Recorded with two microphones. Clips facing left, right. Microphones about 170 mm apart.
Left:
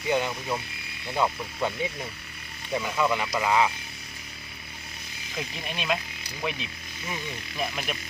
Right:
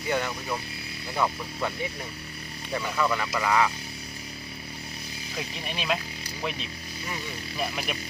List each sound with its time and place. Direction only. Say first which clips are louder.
0.1 s speech: left 2 dB; 15° left (ahead or behind)
2.7 s speech: left 1 dB; 10° left (ahead or behind)
5.4 s speech: left 1 dB; centre (ahead or behind)